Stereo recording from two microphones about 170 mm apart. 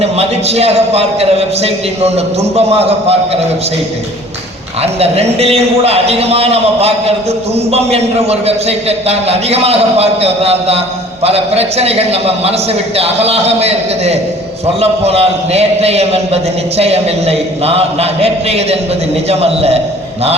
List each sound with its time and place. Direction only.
0.0 s a man's voice: 35° right (ahead or behind)
4.8 s a man's voice: 35° right (ahead or behind)